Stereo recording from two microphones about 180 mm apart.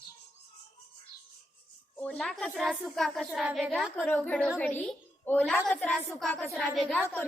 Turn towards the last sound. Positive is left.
turn(degrees=0)  # may be behind; listen again after turning